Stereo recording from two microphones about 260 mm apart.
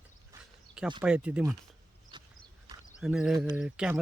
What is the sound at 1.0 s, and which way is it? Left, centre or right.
Speech, centre.